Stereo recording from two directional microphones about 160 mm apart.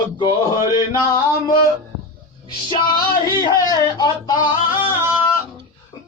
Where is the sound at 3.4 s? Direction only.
25° left (ahead or behind).